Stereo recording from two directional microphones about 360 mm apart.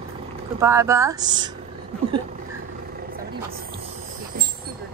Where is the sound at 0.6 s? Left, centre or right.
Centre.